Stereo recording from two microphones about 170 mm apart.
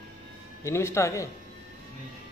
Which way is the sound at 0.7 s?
15° left (ahead or behind).